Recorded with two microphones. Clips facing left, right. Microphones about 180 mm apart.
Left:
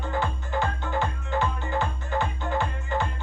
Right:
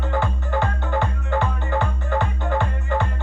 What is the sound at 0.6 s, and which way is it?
Music, 60° right (ahead or behind).